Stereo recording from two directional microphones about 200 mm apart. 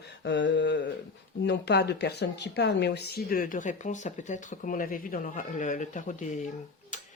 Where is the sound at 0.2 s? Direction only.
60° left (ahead or behind).